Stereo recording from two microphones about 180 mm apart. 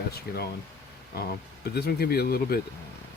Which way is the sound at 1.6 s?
60° left (ahead or behind).